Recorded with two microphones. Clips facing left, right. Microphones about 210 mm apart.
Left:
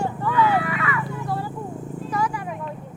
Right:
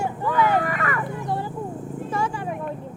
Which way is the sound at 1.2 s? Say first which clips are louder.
Right 1 dB; 20° right (ahead or behind).